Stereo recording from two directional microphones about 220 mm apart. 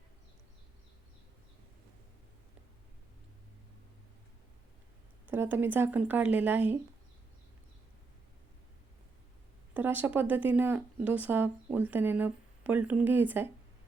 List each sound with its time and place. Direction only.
5.3 s speech: 10° right (ahead or behind)
9.7 s speech: 10° right (ahead or behind)